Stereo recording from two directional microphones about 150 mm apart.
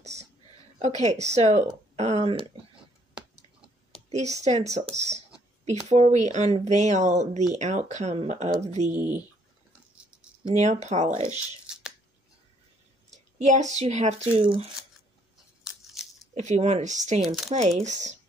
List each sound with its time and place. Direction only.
0.7 s speech: 50° right (ahead or behind)
4.1 s speech: 50° right (ahead or behind)
8.9 s speech: 10° right (ahead or behind)
10.5 s speech: 50° right (ahead or behind)
11.3 s a sound: 5° right (ahead or behind)
13.1 s a woman's voice: 50° right (ahead or behind)
14.4 s speech: 35° right (ahead or behind)
16.3 s speech: 50° right (ahead or behind)
17.2 s speech: centre (ahead or behind)
17.5 s speech: 50° right (ahead or behind)